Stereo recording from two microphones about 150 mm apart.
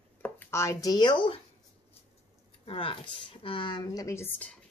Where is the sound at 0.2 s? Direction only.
15° left (ahead or behind); by 1.4 s 35° left (ahead or behind).